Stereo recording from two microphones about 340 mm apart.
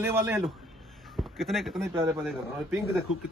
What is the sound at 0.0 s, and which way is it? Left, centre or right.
Speech, centre.